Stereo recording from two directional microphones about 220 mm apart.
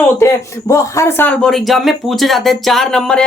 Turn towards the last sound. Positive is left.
turn(degrees=5)  # may be behind; listen again after turning